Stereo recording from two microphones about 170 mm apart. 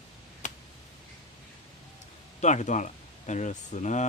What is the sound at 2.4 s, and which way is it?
Speech, 45° left (ahead or behind).